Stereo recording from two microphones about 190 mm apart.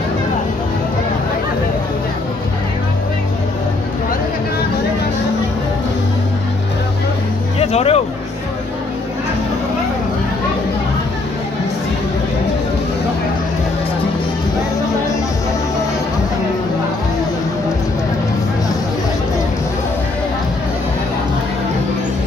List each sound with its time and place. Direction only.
7.6 s music: 35° left (ahead or behind)